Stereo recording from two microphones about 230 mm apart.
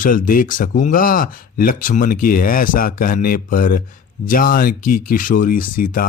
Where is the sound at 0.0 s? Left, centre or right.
Left.